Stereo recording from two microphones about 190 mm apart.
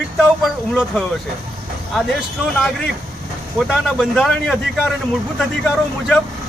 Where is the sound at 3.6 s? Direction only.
Centre (ahead or behind).